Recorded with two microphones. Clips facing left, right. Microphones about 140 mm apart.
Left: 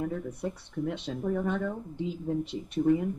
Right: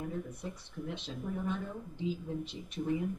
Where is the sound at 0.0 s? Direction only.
60° left (ahead or behind).